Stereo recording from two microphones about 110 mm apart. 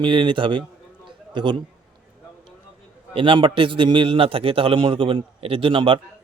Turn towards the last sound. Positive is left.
turn(degrees=-50)  # may be behind; listen again after turning